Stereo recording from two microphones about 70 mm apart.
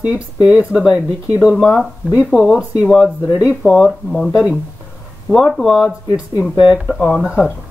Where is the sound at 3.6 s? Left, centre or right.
Centre.